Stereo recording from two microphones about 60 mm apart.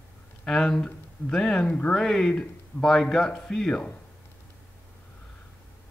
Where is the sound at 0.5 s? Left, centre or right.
Centre.